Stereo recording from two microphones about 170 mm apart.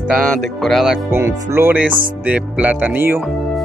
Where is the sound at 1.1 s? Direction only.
15° right (ahead or behind).